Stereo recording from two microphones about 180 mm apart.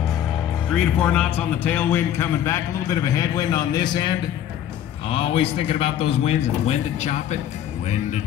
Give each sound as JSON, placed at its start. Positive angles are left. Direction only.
{"t": 0.7, "sound": "a man's voice", "side_deg": 5}
{"t": 5.1, "sound": "a man's voice", "side_deg": 30}